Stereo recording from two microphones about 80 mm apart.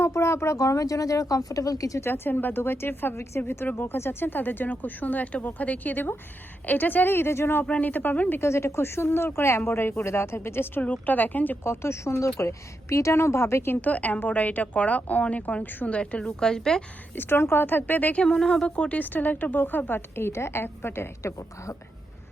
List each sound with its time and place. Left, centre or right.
0.0 s speech: left
2.0 s speech: left
8.4 s speech: left
10.8 s speech: centre
13.8 s speech: centre
17.2 s speech: left